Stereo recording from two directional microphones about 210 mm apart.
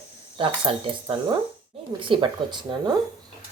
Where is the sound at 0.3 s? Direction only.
25° right (ahead or behind).